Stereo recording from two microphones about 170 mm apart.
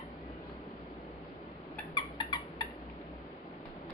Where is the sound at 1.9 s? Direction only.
25° left (ahead or behind).